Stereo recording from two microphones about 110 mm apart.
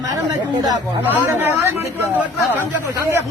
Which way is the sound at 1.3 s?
20° right (ahead or behind).